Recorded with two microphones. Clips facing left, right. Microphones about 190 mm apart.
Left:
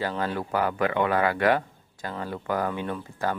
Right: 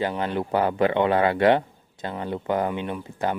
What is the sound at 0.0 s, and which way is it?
Speech, 20° right (ahead or behind).